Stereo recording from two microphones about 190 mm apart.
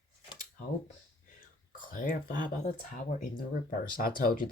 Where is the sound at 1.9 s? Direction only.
45° left (ahead or behind).